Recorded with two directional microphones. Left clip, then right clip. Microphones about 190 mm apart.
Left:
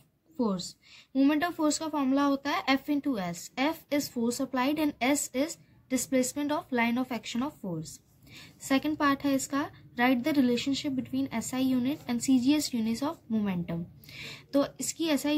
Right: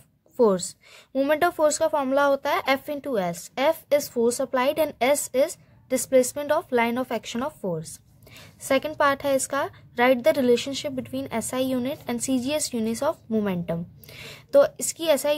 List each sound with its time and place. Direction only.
0.4 s a woman's voice: 50° right (ahead or behind)